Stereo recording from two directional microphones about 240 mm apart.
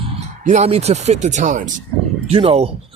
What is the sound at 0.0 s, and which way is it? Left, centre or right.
A woman's voice, right.